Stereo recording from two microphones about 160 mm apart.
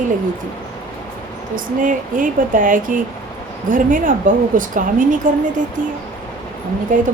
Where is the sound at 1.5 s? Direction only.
60° right (ahead or behind).